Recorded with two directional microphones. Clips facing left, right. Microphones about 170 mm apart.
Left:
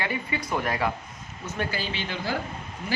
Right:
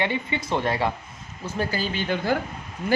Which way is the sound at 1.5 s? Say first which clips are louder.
Right 4 dB; 40° right (ahead or behind).